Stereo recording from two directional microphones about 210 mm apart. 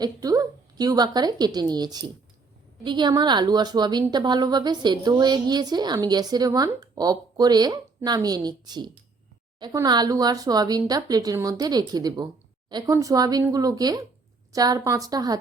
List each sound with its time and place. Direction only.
0.0 s a woman's voice: 15° right (ahead or behind)